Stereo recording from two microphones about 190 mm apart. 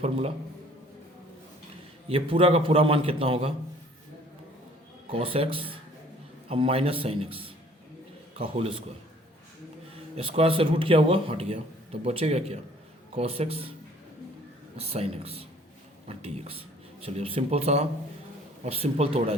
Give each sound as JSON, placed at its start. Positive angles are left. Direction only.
{"t": 0.0, "sound": "a man's voice", "side_deg": -30}
{"t": 2.0, "sound": "a man's voice", "side_deg": -30}
{"t": 5.0, "sound": "a man's voice", "side_deg": -30}
{"t": 10.2, "sound": "a man's voice", "side_deg": -30}
{"t": 14.8, "sound": "a man's voice", "side_deg": -30}